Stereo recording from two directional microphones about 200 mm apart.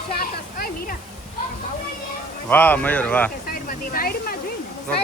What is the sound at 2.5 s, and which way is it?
Speech, 10° left (ahead or behind).